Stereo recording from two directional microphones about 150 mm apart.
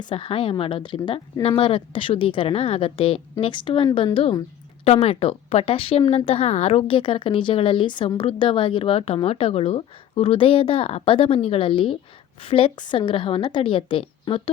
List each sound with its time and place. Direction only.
0.0 s a woman's voice: 35° left (ahead or behind)